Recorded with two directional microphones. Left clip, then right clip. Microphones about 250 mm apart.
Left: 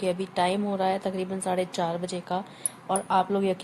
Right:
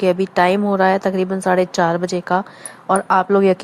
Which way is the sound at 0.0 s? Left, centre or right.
Right.